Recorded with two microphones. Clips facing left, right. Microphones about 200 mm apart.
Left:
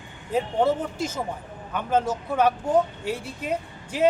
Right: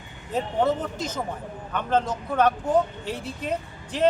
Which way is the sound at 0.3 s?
10° left (ahead or behind).